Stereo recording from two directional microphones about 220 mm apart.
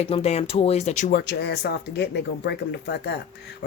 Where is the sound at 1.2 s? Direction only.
50° left (ahead or behind).